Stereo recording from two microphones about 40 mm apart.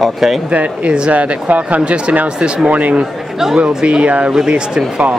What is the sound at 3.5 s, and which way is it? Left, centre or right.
Speech, right.